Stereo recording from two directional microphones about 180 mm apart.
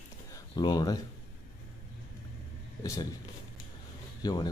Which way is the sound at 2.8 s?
20° left (ahead or behind).